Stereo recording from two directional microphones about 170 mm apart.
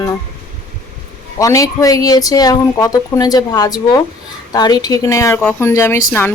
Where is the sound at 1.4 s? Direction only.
20° left (ahead or behind).